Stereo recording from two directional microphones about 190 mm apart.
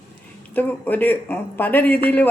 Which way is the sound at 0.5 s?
10° left (ahead or behind).